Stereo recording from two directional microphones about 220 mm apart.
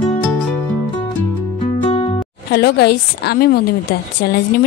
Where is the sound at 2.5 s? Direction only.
45° left (ahead or behind).